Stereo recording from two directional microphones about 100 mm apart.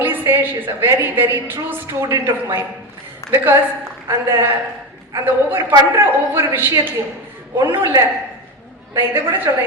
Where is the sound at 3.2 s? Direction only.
30° left (ahead or behind).